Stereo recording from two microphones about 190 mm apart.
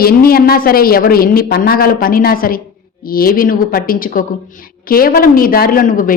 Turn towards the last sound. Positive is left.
turn(degrees=45)  # may be behind; listen again after turning